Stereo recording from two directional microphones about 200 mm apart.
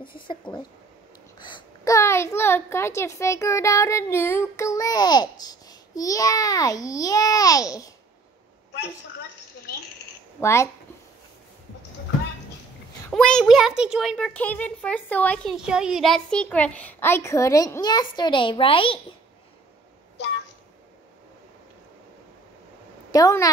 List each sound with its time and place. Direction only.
0.0 s a woman's voice: 25° left (ahead or behind)
10.4 s a woman's voice: 15° left (ahead or behind)
13.1 s a woman's voice: 5° left (ahead or behind); by 18.9 s 25° left (ahead or behind)
23.1 s a woman's voice: 15° left (ahead or behind)